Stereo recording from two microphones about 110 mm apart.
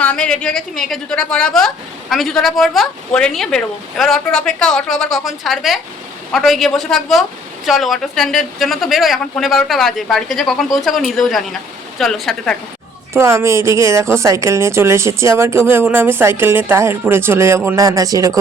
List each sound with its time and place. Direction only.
0.0 s speech: 10° left (ahead or behind)
13.1 s a woman's voice: 25° right (ahead or behind)